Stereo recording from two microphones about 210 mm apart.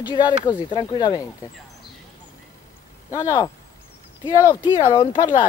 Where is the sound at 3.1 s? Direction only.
15° left (ahead or behind).